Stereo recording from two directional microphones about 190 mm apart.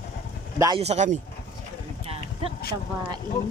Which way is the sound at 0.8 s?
35° right (ahead or behind).